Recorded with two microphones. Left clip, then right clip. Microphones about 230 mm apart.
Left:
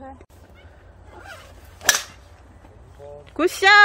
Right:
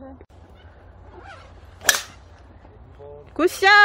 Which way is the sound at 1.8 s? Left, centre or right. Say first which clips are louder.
Even; centre.